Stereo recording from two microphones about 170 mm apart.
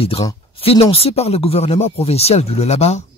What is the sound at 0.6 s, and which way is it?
A man's voice, 35° left (ahead or behind).